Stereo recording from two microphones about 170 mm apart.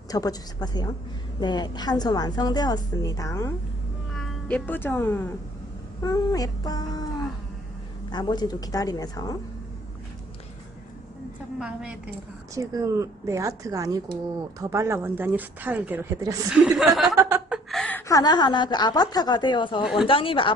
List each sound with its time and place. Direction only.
0.1 s a woman's voice: 20° left (ahead or behind)
4.1 s a woman's voice: centre (ahead or behind); by 7.1 s 20° left (ahead or behind)
8.1 s a woman's voice: 25° left (ahead or behind)
11.6 s a woman's voice: 5° right (ahead or behind)
12.5 s a woman's voice: 20° right (ahead or behind); by 17.1 s centre (ahead or behind)
17.1 s speech: 20° right (ahead or behind)
17.5 s a woman's voice: centre (ahead or behind); by 20.5 s 30° left (ahead or behind)